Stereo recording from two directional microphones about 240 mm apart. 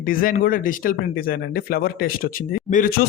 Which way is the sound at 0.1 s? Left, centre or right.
Left.